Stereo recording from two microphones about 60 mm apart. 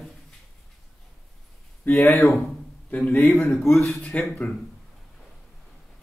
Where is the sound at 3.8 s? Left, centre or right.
Centre.